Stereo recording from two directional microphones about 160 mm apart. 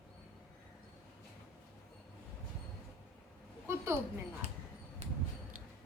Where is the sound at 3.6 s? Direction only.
15° right (ahead or behind).